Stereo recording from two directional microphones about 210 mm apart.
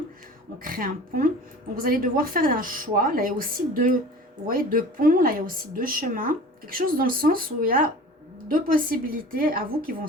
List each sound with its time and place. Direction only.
0.6 s a woman's voice: 40° right (ahead or behind)